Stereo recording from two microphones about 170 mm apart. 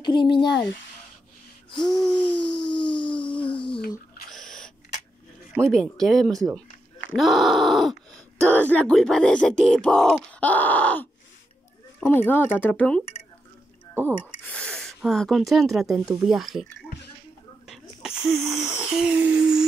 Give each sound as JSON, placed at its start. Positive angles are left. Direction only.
{"t": 0.0, "sound": "speech", "side_deg": 25}
{"t": 1.9, "sound": "speech", "side_deg": 5}
{"t": 2.5, "sound": "a sound", "side_deg": 30}
{"t": 4.3, "sound": "owl", "side_deg": 5}
{"t": 5.7, "sound": "speech", "side_deg": 0}
{"t": 13.9, "sound": "speech", "side_deg": -10}
{"t": 14.4, "sound": "speech", "side_deg": 5}
{"t": 17.6, "sound": "a sound", "side_deg": -5}